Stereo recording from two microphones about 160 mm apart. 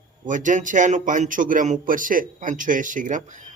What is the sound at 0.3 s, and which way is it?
Speech, 55° right (ahead or behind).